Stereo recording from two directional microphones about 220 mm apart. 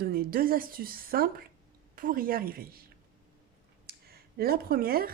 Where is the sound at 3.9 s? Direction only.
45° right (ahead or behind).